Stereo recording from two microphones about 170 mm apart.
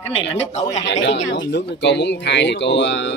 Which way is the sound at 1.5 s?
90° left.